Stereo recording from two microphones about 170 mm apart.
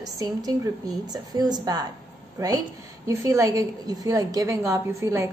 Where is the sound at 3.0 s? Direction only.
20° right (ahead or behind).